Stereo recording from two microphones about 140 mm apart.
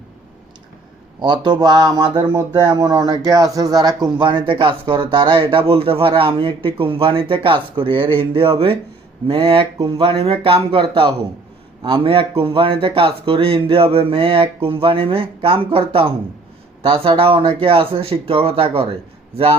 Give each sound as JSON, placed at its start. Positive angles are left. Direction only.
{"t": 1.2, "sound": "speech", "side_deg": -35}